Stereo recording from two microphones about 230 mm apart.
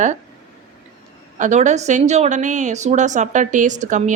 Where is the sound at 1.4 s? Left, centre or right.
Right.